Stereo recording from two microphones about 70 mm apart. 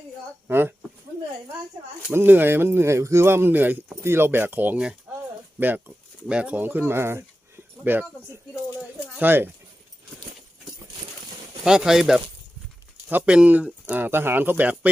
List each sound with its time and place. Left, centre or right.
0.4 s speech: right
2.1 s speech: right
6.2 s speech: centre
11.6 s speech: centre
13.2 s speech: centre
13.9 s speech: right